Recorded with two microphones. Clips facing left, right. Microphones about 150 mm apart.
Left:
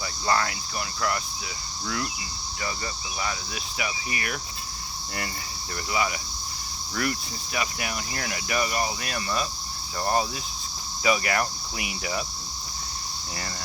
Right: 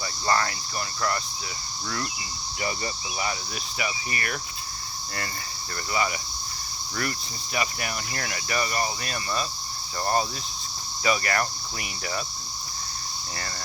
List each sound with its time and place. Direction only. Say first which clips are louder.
0.3 s speech: even; 5° left (ahead or behind)
2.6 s speech: right 2 dB; 20° right (ahead or behind)
3.8 s speech: right 1 dB; centre (ahead or behind)
5.9 s speech: even; 5° left (ahead or behind)
6.9 s cricket: left 3 dB; 5° left (ahead or behind)
11.0 s cricket: left 1 dB; 5° left (ahead or behind)